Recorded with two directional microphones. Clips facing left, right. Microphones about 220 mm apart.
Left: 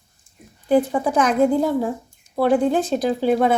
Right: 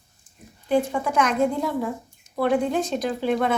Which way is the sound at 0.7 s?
35° left (ahead or behind).